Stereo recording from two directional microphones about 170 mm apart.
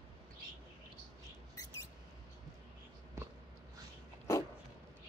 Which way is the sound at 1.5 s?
20° left (ahead or behind).